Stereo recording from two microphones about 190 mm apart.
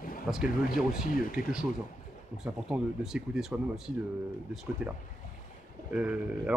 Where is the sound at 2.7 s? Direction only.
5° right (ahead or behind).